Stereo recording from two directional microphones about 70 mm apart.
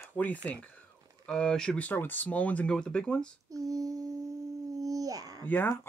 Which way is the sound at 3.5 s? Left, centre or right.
Right.